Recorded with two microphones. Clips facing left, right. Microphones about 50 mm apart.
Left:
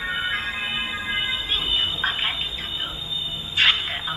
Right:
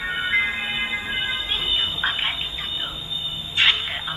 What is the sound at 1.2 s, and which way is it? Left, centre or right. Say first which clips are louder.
Music: even; right.